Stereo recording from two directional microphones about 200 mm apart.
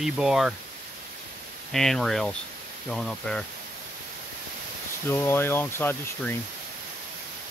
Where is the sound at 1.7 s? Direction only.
Centre (ahead or behind).